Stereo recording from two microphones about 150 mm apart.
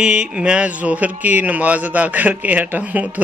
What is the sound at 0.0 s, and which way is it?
Speech, 5° right (ahead or behind).